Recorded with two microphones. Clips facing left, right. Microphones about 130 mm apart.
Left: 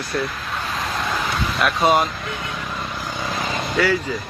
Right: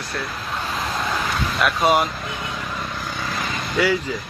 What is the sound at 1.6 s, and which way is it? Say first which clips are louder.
Speech: left 1 dB; 10° right (ahead or behind).